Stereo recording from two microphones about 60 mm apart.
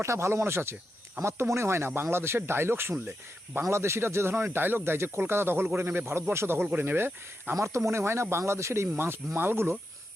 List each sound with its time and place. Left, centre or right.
0.0 s speech: right
7.5 s speech: right